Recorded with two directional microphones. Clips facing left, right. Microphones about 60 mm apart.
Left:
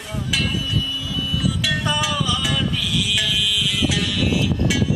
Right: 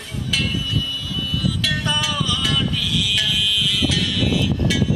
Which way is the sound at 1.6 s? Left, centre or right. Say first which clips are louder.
Left 1 dB; centre.